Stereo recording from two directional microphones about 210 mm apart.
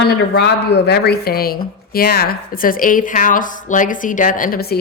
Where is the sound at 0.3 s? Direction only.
50° left (ahead or behind).